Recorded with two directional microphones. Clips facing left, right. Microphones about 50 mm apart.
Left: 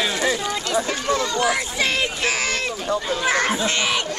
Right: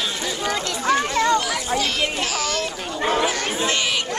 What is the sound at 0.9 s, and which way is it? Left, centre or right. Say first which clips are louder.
Speech: right 4 dB; right.